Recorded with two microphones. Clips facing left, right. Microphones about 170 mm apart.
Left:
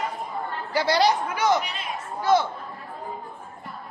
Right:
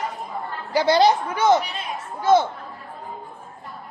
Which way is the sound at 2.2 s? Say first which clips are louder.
Right 4 dB; 25° right (ahead or behind).